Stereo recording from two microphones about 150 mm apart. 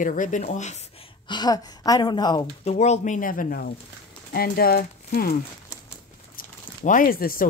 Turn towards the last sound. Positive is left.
turn(degrees=70)  # may be behind; listen again after turning